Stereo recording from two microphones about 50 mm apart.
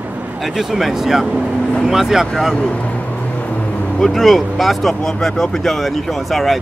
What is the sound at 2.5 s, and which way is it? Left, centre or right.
Vehicle, left.